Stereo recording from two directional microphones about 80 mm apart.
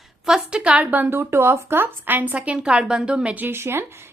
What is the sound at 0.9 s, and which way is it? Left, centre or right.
Speech, right.